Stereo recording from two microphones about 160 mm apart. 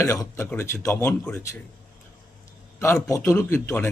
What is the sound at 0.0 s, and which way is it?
Speech, 20° left (ahead or behind).